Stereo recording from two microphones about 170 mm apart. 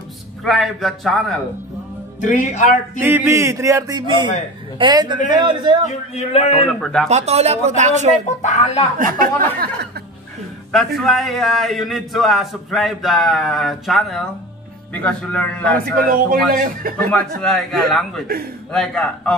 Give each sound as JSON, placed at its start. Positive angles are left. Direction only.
{"t": 0.4, "sound": "a man's voice", "side_deg": 0}
{"t": 2.1, "sound": "speech", "side_deg": 45}
{"t": 3.0, "sound": "a man's voice", "side_deg": -10}
{"t": 5.9, "sound": "a man's voice", "side_deg": 35}
{"t": 6.8, "sound": "a man's voice", "side_deg": 5}
{"t": 7.1, "sound": "speech", "side_deg": -40}
{"t": 8.4, "sound": "speech", "side_deg": 40}
{"t": 8.9, "sound": "speech", "side_deg": -55}
{"t": 11.0, "sound": "a man's voice", "side_deg": 0}
{"t": 15.8, "sound": "speech", "side_deg": -60}
{"t": 17.4, "sound": "a man's voice", "side_deg": 0}